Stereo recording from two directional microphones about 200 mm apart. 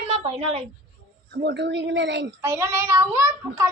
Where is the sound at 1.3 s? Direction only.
60° right (ahead or behind).